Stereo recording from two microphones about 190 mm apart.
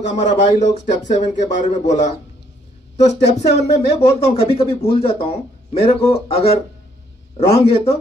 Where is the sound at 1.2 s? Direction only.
40° left (ahead or behind).